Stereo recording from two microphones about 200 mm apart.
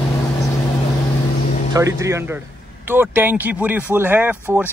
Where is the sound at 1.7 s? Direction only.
15° right (ahead or behind).